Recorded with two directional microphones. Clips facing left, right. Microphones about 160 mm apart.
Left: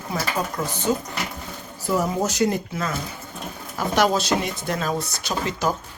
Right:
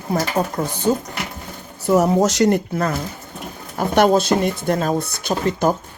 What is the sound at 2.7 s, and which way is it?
Speech, 45° right (ahead or behind).